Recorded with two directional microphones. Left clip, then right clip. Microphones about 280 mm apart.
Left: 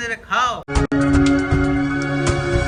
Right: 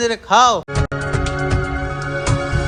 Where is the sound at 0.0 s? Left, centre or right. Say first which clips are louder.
Right 7 dB; centre.